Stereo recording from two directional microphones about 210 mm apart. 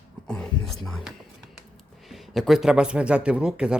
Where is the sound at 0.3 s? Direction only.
5° left (ahead or behind).